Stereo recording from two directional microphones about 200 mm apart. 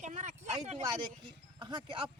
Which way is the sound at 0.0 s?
35° right (ahead or behind).